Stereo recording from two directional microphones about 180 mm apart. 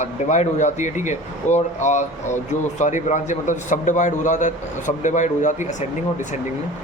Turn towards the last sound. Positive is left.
turn(degrees=45)  # may be behind; listen again after turning